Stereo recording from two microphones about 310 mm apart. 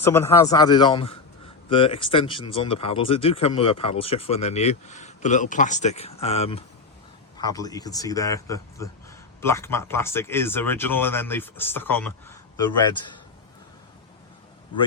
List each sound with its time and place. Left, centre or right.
0.0 s speech: centre